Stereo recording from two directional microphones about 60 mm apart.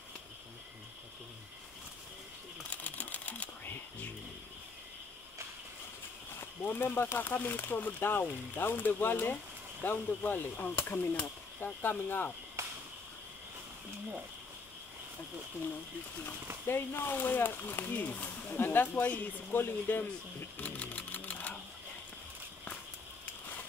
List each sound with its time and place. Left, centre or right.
2.7 s typewriter: left
6.6 s speech: left
12.6 s a sound: right
16.6 s speech: left
19.5 s typewriter: left